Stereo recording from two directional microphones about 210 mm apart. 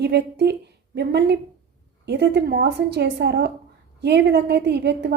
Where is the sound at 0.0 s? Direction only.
55° right (ahead or behind).